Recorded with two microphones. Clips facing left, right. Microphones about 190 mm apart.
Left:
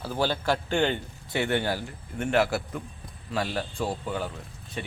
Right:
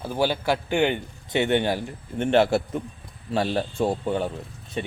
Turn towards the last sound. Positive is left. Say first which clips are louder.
# right 6 dB
turn(degrees=-25)  # may be behind; listen again after turning